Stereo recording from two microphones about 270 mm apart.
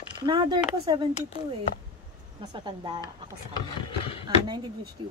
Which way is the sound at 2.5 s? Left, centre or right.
Centre.